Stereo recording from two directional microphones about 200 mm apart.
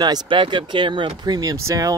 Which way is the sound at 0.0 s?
20° right (ahead or behind).